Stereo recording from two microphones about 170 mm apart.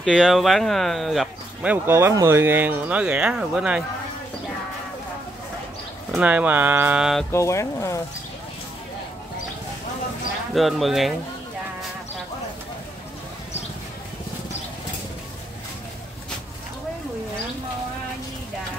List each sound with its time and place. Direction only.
0.0 s speech: centre (ahead or behind)
6.1 s speech: 10° right (ahead or behind)
7.2 s speech: 15° left (ahead or behind)
10.5 s speech: centre (ahead or behind)